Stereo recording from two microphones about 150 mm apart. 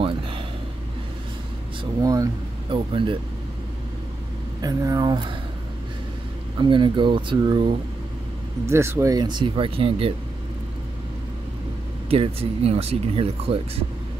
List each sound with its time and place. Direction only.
0.0 s a sound: 35° right (ahead or behind)
2.0 s speech: 25° right (ahead or behind)
2.7 s speech: 35° right (ahead or behind)
4.6 s speech: 25° right (ahead or behind)
6.6 s speech: 35° right (ahead or behind)
8.6 s speech: 15° right (ahead or behind); by 10.1 s 40° right (ahead or behind)
12.1 s speech: 40° right (ahead or behind)